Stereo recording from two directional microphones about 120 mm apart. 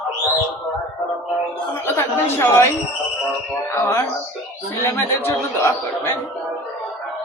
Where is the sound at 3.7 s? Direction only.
20° left (ahead or behind).